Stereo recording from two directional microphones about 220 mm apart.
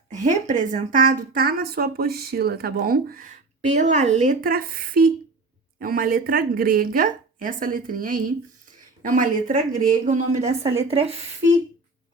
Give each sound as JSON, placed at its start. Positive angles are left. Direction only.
{"t": 0.1, "sound": "speech", "side_deg": -35}